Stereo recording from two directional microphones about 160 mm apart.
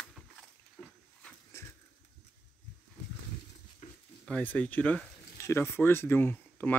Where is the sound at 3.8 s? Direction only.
50° left (ahead or behind).